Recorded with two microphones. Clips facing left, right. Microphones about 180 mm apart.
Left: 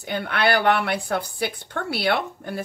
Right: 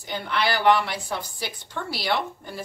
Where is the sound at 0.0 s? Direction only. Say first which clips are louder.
Left 3 dB; 60° left (ahead or behind).